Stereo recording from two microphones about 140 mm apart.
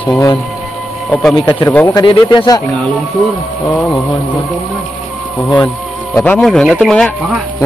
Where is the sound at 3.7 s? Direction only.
10° left (ahead or behind).